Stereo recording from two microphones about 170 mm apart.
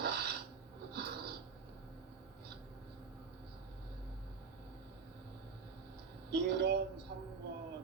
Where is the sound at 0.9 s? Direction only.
70° right (ahead or behind).